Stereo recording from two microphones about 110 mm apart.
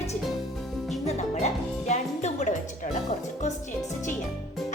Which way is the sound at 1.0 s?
90° left.